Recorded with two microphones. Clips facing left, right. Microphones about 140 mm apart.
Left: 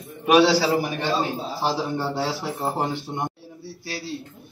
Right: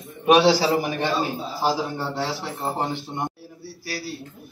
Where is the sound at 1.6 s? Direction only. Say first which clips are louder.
Right 1 dB; centre (ahead or behind).